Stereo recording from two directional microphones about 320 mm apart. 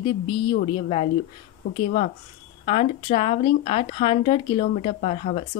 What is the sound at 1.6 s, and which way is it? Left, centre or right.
Speech, left.